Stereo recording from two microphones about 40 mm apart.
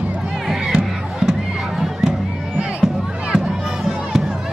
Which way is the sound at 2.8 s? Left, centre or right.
Centre.